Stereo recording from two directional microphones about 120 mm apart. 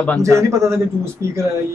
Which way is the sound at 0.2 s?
25° right (ahead or behind).